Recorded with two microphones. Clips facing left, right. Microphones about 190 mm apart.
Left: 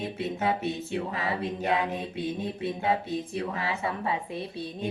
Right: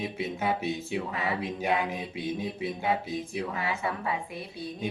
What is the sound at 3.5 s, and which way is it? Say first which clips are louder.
Speech: left 1 dB; 25° left (ahead or behind).